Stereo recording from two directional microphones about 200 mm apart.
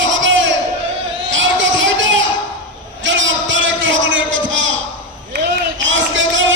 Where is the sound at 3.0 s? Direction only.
70° right (ahead or behind).